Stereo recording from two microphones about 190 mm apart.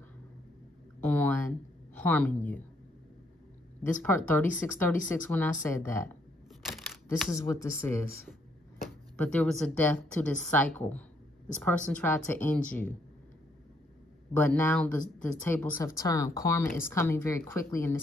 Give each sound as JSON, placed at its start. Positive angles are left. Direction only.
{"t": 1.0, "sound": "a sound", "side_deg": 10}
{"t": 3.8, "sound": "speech", "side_deg": 10}
{"t": 6.6, "sound": "a sound", "side_deg": 0}
{"t": 7.2, "sound": "speech", "side_deg": 0}
{"t": 7.4, "sound": "speech", "side_deg": 15}
{"t": 14.3, "sound": "speech", "side_deg": 10}